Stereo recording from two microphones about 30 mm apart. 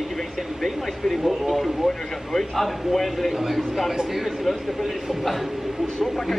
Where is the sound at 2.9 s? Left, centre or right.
Centre.